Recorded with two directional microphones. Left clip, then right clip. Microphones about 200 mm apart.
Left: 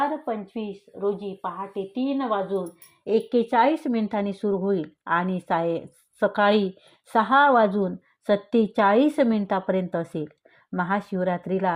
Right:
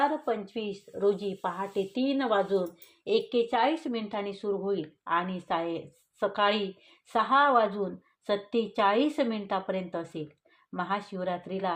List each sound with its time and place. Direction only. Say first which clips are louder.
0.0 s speech: left 2 dB; 5° left (ahead or behind)
3.2 s speech: left 6 dB; 40° left (ahead or behind)